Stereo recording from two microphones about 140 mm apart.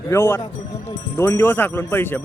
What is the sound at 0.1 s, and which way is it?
Speech, 20° left (ahead or behind).